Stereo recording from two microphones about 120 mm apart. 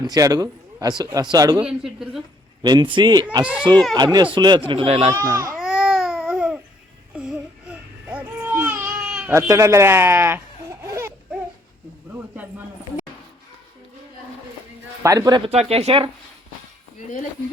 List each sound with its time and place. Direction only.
0.0 s a man's voice: 30° right (ahead or behind)
1.6 s speech: 5° right (ahead or behind)
2.6 s speech: 35° right (ahead or behind)
4.9 s speech: 60° right (ahead or behind)
5.1 s speech: 30° right (ahead or behind)
5.5 s baby cry: 5° right (ahead or behind)
9.3 s speech: 25° right (ahead or behind)
15.0 s speech: 30° right (ahead or behind)
15.4 s speech: 60° right (ahead or behind)